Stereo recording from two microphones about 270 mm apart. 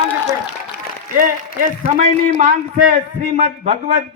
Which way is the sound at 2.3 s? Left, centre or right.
Right.